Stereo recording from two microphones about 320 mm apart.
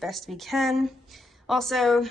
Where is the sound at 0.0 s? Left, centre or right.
Centre.